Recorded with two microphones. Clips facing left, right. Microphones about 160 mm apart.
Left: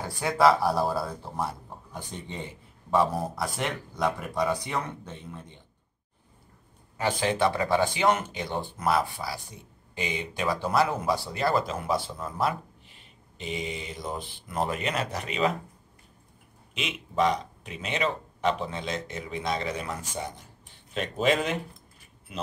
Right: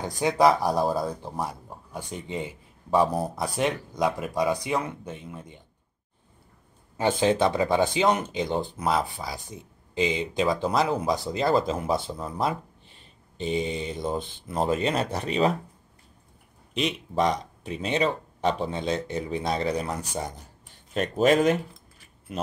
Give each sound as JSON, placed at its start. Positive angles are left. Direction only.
{"t": 0.0, "sound": "speech", "side_deg": -20}
{"t": 7.0, "sound": "speech", "side_deg": -25}
{"t": 13.4, "sound": "speech", "side_deg": -30}
{"t": 16.7, "sound": "speech", "side_deg": -40}